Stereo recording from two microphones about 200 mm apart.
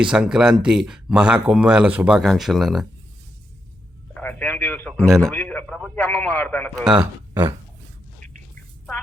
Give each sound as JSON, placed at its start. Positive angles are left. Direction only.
{"t": 0.1, "sound": "speech", "side_deg": -5}
{"t": 4.1, "sound": "a man's voice", "side_deg": 10}
{"t": 6.9, "sound": "speech", "side_deg": -20}